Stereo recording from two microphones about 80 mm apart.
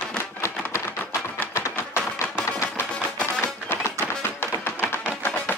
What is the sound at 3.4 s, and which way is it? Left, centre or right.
Music, left.